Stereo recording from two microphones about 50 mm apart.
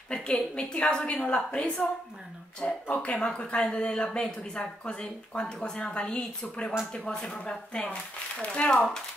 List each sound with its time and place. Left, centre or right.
0.1 s speech: centre
3.2 s speech: centre